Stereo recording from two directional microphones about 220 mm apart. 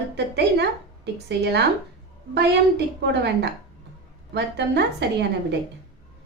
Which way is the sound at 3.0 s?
50° right (ahead or behind).